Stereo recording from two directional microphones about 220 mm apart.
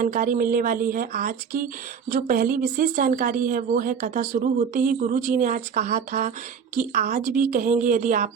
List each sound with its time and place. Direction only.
0.0 s speech: 40° right (ahead or behind)